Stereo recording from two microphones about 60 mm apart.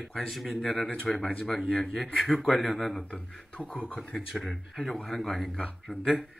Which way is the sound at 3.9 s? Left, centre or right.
Centre.